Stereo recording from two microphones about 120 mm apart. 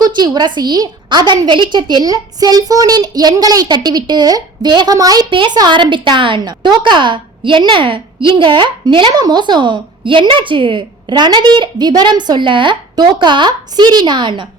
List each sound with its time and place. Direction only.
0.0 s a woman's voice: 35° right (ahead or behind)